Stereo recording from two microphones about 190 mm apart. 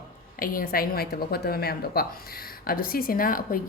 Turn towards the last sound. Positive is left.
turn(degrees=50)  # may be behind; listen again after turning